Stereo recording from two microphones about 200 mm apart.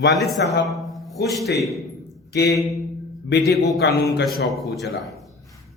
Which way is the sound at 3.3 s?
55° left (ahead or behind).